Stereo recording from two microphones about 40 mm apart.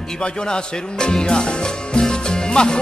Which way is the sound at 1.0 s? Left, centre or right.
Left.